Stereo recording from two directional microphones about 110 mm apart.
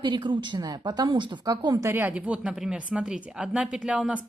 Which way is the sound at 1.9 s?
15° right (ahead or behind).